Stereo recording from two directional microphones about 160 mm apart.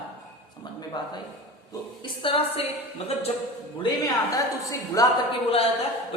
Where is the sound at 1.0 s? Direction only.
25° left (ahead or behind).